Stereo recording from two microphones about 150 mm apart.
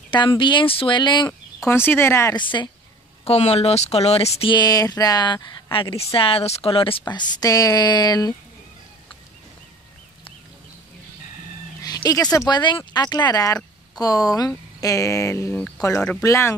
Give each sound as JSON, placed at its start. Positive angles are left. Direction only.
{"t": 0.1, "sound": "speech", "side_deg": 30}
{"t": 1.7, "sound": "speech", "side_deg": 15}
{"t": 2.3, "sound": "speech", "side_deg": 30}
{"t": 3.3, "sound": "speech", "side_deg": 45}
{"t": 11.8, "sound": "a sound", "side_deg": 25}
{"t": 12.3, "sound": "speech", "side_deg": 25}